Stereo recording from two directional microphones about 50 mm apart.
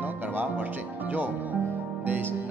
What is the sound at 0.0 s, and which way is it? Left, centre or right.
Music, right.